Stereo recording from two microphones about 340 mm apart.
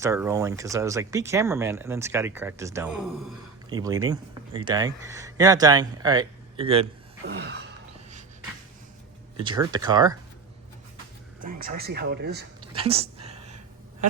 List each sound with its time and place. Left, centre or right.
0.0 s speech: centre
7.3 s speech: right
9.4 s speech: centre
11.3 s speech: right
12.5 s a sound: centre